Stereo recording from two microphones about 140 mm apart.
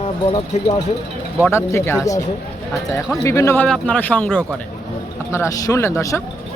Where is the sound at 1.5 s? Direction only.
20° left (ahead or behind).